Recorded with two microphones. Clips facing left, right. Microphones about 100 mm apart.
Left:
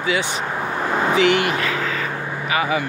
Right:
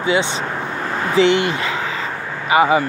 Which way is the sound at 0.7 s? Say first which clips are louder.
Left 5 dB; 15° left (ahead or behind).